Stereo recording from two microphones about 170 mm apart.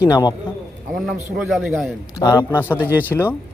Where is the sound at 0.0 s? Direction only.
20° left (ahead or behind).